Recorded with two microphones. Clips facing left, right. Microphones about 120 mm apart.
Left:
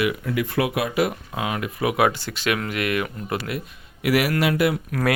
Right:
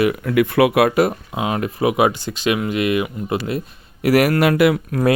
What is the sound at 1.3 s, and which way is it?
Speech, 25° right (ahead or behind).